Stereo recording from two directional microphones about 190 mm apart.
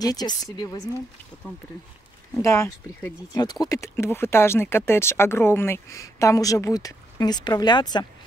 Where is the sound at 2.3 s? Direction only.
15° left (ahead or behind).